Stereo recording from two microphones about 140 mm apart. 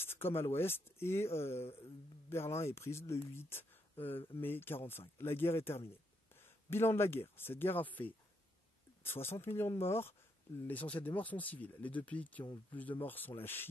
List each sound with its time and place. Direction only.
0.0 s speech: 15° left (ahead or behind)